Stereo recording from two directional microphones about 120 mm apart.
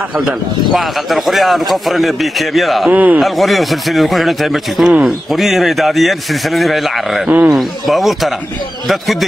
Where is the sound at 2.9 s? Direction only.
15° right (ahead or behind).